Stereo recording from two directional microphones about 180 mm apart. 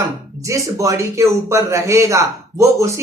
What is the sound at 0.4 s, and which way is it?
Speech, 15° right (ahead or behind).